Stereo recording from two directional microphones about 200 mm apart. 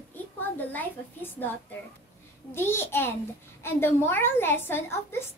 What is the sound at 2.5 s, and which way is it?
A woman's voice, 10° left (ahead or behind).